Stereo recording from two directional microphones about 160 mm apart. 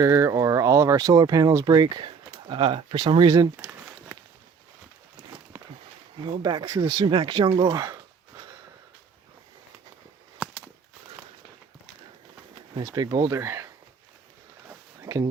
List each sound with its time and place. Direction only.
0.0 s speech: 20° right (ahead or behind)
6.4 s speech: 25° right (ahead or behind)
12.8 s speech: 25° right (ahead or behind)
15.0 s a sound: 20° right (ahead or behind)